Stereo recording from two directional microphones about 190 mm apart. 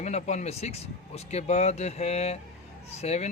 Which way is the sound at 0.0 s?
35° left (ahead or behind).